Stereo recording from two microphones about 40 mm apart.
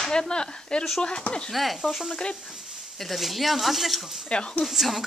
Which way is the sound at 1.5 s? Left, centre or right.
Centre.